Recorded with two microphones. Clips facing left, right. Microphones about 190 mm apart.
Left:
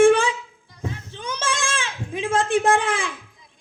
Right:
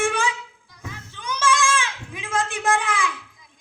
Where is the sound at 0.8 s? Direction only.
30° left (ahead or behind).